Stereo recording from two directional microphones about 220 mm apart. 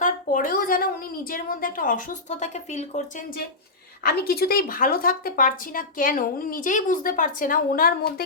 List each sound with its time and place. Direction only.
0.0 s a woman's voice: 40° left (ahead or behind)
4.0 s a woman's voice: 45° left (ahead or behind)